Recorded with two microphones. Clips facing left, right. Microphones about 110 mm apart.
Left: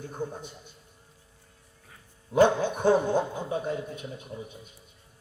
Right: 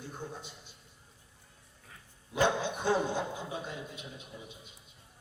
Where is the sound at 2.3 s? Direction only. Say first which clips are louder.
Left 8 dB; 50° left (ahead or behind).